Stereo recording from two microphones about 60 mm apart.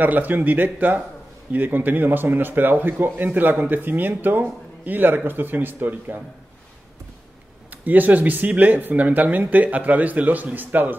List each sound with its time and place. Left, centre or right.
0.0 s a man's voice: right
7.7 s speech: right